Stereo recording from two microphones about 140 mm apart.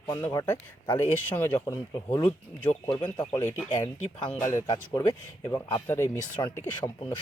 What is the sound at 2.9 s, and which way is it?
Speech, 35° left (ahead or behind).